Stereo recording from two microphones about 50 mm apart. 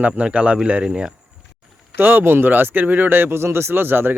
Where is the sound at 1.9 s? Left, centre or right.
Right.